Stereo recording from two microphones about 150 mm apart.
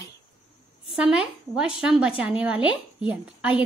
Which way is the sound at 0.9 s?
5° right (ahead or behind).